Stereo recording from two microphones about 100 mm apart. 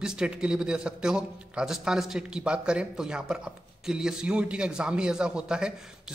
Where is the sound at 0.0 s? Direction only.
10° right (ahead or behind).